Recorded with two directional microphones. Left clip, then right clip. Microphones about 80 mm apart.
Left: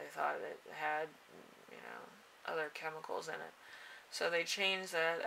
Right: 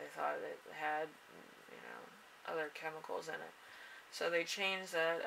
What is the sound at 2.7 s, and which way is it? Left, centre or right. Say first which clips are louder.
Speech: left 1 dB; left.